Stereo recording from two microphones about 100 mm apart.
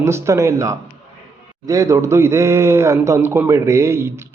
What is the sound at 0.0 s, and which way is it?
A man's voice, 30° right (ahead or behind).